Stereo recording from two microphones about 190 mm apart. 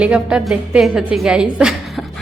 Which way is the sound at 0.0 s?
5° right (ahead or behind).